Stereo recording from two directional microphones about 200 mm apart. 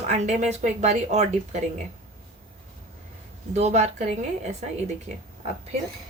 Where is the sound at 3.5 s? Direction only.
35° right (ahead or behind).